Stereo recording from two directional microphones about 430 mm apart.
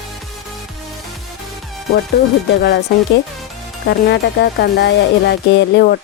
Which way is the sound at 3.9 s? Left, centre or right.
Left.